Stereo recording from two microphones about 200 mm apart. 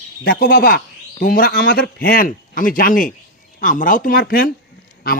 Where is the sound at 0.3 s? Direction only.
45° left (ahead or behind).